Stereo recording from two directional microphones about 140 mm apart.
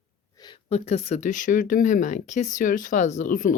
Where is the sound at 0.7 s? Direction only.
50° left (ahead or behind).